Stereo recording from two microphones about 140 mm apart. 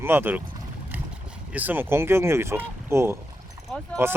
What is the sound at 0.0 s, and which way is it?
Speech, 15° right (ahead or behind).